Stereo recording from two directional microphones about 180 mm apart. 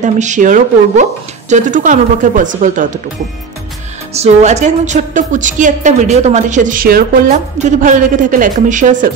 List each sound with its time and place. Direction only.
0.0 s a woman's voice: 40° right (ahead or behind)
4.1 s a woman's voice: 40° right (ahead or behind); by 7.1 s 55° right (ahead or behind)
7.5 s a woman's voice: 45° right (ahead or behind)